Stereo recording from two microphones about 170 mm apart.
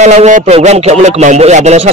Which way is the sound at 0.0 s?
40° right (ahead or behind).